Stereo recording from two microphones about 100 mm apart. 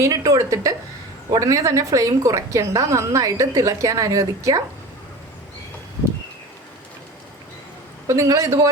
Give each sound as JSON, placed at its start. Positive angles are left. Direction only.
{"t": 0.0, "sound": "a woman's voice", "side_deg": -30}
{"t": 8.0, "sound": "a woman's voice", "side_deg": -30}